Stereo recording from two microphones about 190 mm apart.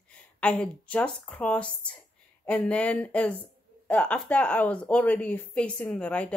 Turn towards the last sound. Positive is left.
turn(degrees=5)  # may be behind; listen again after turning